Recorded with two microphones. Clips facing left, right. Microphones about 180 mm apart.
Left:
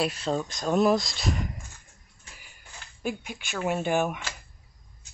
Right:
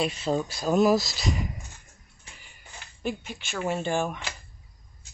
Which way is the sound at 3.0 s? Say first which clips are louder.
Even; 10° left (ahead or behind).